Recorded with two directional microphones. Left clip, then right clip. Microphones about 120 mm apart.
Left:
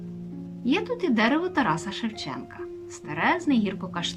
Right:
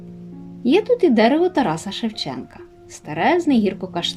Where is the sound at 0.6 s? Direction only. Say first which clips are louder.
Right 10 dB; 35° right (ahead or behind).